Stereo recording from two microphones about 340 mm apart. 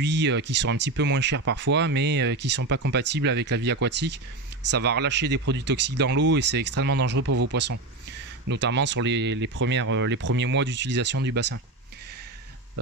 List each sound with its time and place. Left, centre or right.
0.0 s speech: right